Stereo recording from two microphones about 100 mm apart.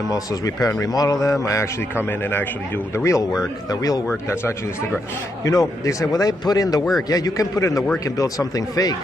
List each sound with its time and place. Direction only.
0.1 s speech: 35° left (ahead or behind)
3.0 s speech: 35° left (ahead or behind)
4.1 s speech: 25° left (ahead or behind)